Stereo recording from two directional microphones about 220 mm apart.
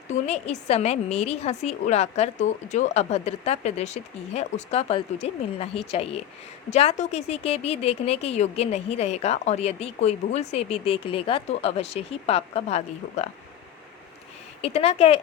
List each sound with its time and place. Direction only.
0.1 s speech: 30° left (ahead or behind)
14.6 s speech: 30° left (ahead or behind)